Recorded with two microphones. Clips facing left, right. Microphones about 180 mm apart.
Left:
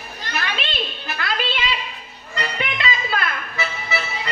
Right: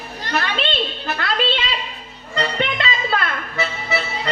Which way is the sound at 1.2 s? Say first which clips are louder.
Right 3 dB; 30° right (ahead or behind).